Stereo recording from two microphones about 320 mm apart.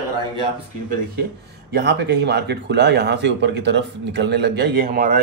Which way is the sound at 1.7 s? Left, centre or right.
Right.